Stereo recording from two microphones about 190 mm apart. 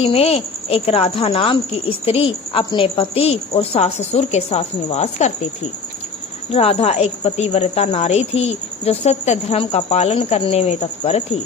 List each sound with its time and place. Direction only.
0.0 s speech: 30° left (ahead or behind)
6.5 s speech: 30° left (ahead or behind)